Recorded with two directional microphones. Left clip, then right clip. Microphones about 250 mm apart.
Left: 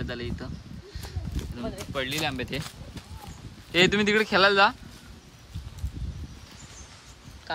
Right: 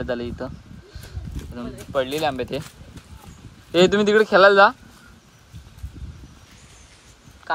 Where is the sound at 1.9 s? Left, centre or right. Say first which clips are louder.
Right 8 dB; centre.